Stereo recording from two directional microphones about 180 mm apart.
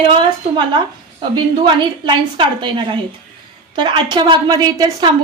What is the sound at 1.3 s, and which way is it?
A woman's voice, 25° right (ahead or behind).